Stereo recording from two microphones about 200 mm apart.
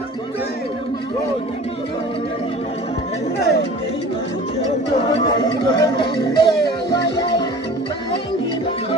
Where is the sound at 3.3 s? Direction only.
55° left (ahead or behind).